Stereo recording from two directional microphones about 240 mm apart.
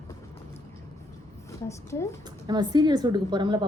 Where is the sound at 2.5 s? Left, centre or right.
Centre.